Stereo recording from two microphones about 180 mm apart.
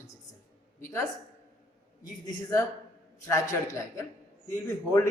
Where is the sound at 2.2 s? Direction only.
20° left (ahead or behind).